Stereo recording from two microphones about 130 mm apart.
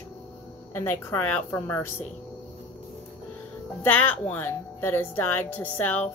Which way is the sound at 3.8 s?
15° left (ahead or behind).